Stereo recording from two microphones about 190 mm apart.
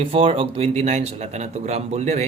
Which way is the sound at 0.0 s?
30° right (ahead or behind).